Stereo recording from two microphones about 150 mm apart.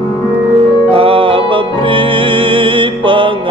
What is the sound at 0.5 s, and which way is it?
Music, 40° right (ahead or behind).